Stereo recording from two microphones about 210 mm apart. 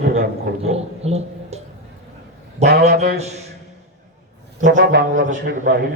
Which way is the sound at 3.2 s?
30° right (ahead or behind).